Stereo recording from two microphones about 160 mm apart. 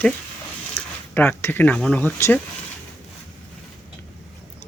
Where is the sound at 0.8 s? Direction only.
15° left (ahead or behind).